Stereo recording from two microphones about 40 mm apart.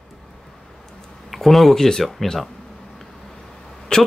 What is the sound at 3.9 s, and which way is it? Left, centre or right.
Speech, left.